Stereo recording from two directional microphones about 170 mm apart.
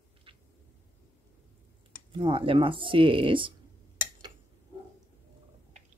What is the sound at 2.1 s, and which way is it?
Speech, 30° right (ahead or behind).